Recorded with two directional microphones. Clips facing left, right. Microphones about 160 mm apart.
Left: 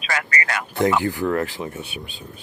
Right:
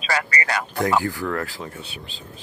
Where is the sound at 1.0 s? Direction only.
20° left (ahead or behind).